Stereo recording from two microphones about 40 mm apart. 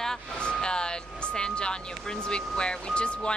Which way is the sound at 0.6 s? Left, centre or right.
Left.